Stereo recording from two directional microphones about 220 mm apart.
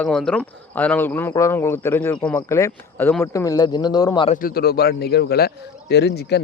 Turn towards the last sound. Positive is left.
turn(degrees=50)  # may be behind; listen again after turning